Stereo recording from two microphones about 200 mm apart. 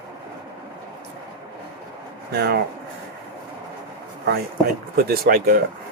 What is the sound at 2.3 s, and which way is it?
Speech, 50° right (ahead or behind).